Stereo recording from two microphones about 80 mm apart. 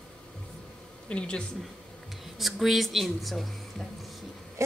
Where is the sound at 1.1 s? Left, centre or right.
Centre.